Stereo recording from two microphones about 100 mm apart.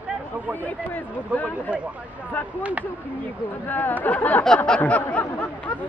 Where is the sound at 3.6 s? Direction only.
20° left (ahead or behind).